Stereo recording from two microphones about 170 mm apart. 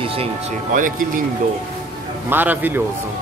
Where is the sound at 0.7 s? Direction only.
50° right (ahead or behind).